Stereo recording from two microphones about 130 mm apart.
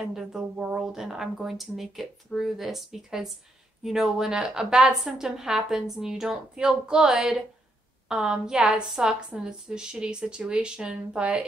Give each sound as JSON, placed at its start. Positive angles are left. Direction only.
{"t": 0.0, "sound": "a woman's voice", "side_deg": -5}